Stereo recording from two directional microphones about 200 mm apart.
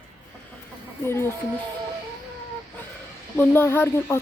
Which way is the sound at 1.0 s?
10° left (ahead or behind).